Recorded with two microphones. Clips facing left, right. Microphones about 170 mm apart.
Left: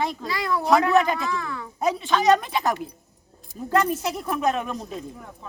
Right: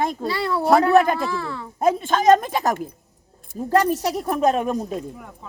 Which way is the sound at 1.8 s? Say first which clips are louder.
Right 3 dB; 50° right (ahead or behind).